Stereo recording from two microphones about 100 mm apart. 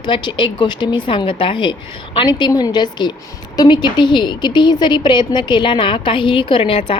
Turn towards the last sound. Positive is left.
turn(degrees=65)  # may be behind; listen again after turning